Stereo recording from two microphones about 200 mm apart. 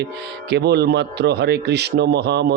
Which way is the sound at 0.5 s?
55° right (ahead or behind).